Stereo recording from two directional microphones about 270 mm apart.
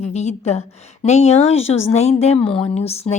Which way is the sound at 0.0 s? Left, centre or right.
Left.